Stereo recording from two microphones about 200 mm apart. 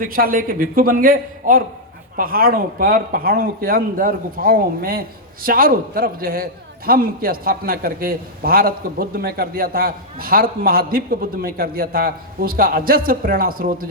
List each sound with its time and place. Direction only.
0.0 s speech: 45° right (ahead or behind)